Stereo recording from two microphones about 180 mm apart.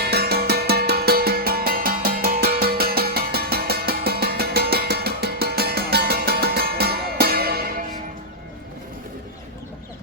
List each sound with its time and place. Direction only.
0.0 s music: 60° right (ahead or behind)